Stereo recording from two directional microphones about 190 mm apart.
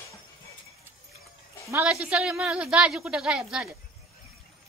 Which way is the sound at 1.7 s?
5° right (ahead or behind).